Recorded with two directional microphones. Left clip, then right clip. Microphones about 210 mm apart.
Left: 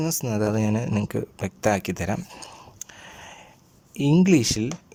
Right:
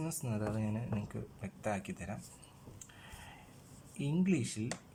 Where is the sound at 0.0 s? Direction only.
50° left (ahead or behind).